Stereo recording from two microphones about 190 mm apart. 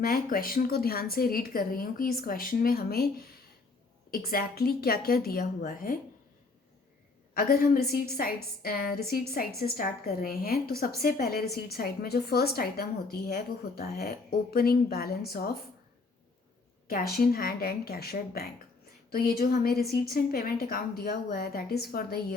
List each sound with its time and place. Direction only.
0.0 s a woman's voice: 50° left (ahead or behind)
4.1 s a woman's voice: 50° left (ahead or behind)
7.3 s a woman's voice: 50° left (ahead or behind)
16.9 s a woman's voice: 50° left (ahead or behind)